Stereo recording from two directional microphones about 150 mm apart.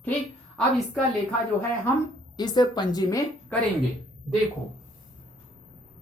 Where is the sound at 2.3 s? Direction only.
30° left (ahead or behind).